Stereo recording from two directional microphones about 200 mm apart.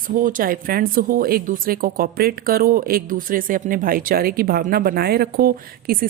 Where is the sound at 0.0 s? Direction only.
45° right (ahead or behind).